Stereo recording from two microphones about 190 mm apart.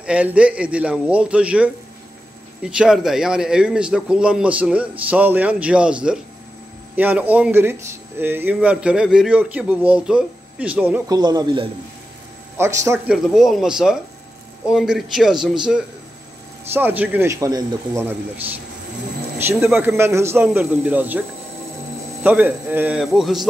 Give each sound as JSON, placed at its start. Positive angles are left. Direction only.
{"t": 0.0, "sound": "a man's voice", "side_deg": -5}
{"t": 11.1, "sound": "speech", "side_deg": -20}
{"t": 12.5, "sound": "a man's voice", "side_deg": -15}
{"t": 13.1, "sound": "a man's voice", "side_deg": 0}
{"t": 16.7, "sound": "a man's voice", "side_deg": -10}
{"t": 22.2, "sound": "a man's voice", "side_deg": -10}